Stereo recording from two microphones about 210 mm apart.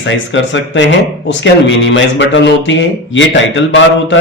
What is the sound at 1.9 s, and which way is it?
A man's voice, 60° left (ahead or behind).